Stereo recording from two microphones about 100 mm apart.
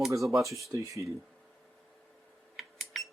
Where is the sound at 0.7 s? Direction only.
30° right (ahead or behind).